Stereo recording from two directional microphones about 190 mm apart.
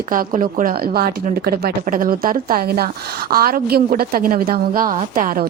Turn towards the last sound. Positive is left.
turn(degrees=-45)  # may be behind; listen again after turning